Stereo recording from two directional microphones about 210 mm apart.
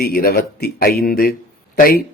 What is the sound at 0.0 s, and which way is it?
A man's voice, 45° left (ahead or behind).